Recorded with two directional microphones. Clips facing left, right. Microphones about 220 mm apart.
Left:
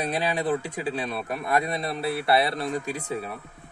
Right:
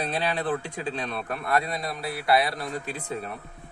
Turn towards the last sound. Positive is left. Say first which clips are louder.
# left 2 dB
turn(degrees=10)  # may be behind; listen again after turning